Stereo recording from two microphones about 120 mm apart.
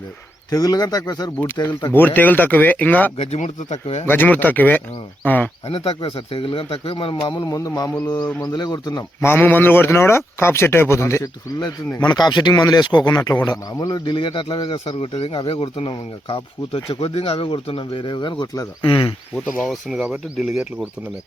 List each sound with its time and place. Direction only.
0.5 s speech: 30° left (ahead or behind)
1.9 s speech: 15° left (ahead or behind)
3.2 s speech: 60° left (ahead or behind)
4.0 s speech: 15° left (ahead or behind)
5.6 s speech: 50° left (ahead or behind)
7.3 s speech: 30° left (ahead or behind)
9.2 s speech: 15° left (ahead or behind)
11.9 s speech: 35° left (ahead or behind)
18.8 s speech: 45° left (ahead or behind)
19.3 s speech: 5° left (ahead or behind)